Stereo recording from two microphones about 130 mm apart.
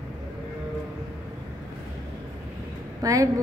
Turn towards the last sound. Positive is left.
turn(degrees=-25)  # may be behind; listen again after turning